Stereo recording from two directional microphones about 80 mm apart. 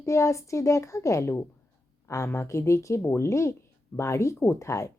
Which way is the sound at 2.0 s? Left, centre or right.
Left.